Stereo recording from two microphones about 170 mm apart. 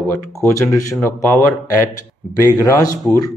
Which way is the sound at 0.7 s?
15° left (ahead or behind).